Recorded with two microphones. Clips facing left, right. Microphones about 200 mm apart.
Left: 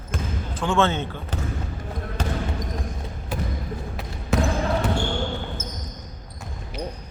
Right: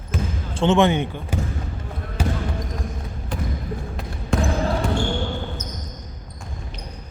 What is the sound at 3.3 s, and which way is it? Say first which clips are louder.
Basketball bounce: right 1 dB; 5° left (ahead or behind).